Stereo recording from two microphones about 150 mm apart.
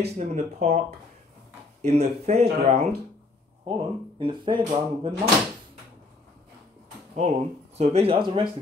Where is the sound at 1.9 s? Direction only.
45° right (ahead or behind).